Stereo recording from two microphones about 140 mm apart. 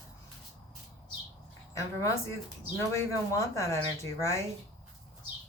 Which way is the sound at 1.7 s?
20° left (ahead or behind).